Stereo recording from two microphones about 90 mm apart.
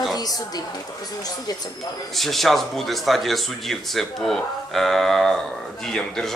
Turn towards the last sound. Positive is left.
turn(degrees=5)  # may be behind; listen again after turning